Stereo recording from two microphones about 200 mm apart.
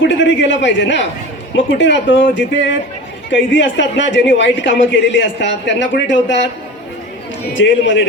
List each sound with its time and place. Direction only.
0.0 s a man's voice: 65° left (ahead or behind)
3.2 s a man's voice: 65° left (ahead or behind)
7.5 s speech: 65° left (ahead or behind)